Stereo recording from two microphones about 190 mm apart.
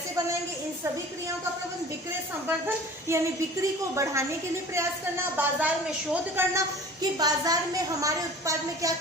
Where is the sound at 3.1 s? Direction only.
15° right (ahead or behind).